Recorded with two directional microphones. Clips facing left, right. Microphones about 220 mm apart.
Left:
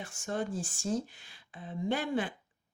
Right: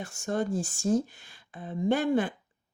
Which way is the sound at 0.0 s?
45° right (ahead or behind).